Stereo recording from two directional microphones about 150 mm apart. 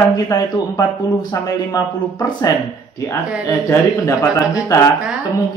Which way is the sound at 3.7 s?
20° left (ahead or behind).